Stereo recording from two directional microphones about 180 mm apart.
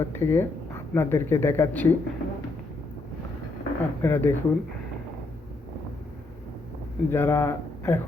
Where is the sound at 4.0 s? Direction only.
15° left (ahead or behind).